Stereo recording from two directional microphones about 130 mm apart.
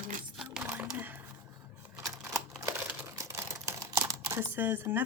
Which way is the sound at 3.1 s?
20° right (ahead or behind).